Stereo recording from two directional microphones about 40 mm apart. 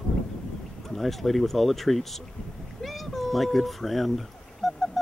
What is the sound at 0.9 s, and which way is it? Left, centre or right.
Speech, centre.